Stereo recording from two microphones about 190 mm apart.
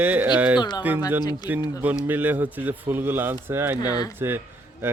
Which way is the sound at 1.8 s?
10° right (ahead or behind).